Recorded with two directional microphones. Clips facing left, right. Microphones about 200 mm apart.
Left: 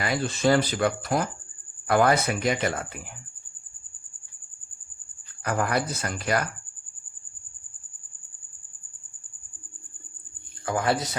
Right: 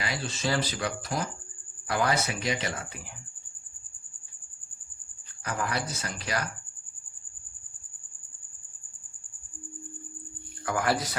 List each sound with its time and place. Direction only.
0.0 s speech: 55° left (ahead or behind)
5.4 s speech: 55° left (ahead or behind)
10.7 s speech: 25° left (ahead or behind)